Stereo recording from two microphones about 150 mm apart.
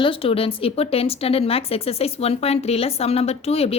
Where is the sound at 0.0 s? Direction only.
35° left (ahead or behind).